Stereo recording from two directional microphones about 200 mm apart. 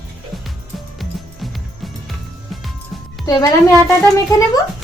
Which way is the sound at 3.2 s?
15° left (ahead or behind).